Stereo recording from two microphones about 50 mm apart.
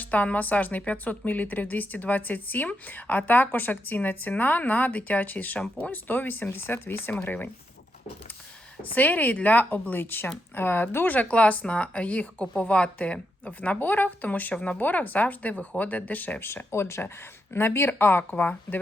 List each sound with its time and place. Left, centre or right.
0.0 s a woman's voice: left
9.0 s a woman's voice: left
14.5 s speech: left
14.8 s a woman's voice: left
16.5 s a woman's voice: left